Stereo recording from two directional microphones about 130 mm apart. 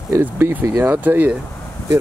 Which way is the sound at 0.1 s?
15° right (ahead or behind).